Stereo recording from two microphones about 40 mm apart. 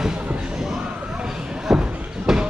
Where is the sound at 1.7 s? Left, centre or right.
Centre.